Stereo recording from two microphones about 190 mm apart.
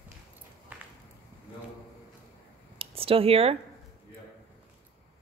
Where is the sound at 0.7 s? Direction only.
5° right (ahead or behind).